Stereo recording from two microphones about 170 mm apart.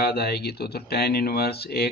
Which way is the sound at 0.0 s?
70° left (ahead or behind).